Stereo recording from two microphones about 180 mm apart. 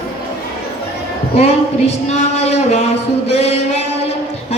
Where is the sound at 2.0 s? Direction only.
40° left (ahead or behind).